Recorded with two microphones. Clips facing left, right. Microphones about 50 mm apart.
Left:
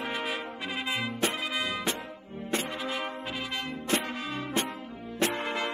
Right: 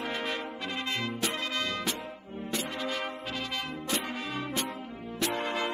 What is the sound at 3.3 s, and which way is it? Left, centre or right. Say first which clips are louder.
Music: left 1 dB; centre.